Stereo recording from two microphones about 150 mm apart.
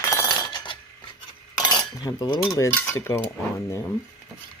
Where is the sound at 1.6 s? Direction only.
25° left (ahead or behind).